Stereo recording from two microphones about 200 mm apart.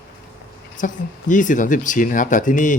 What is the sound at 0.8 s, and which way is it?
Speech, 40° left (ahead or behind).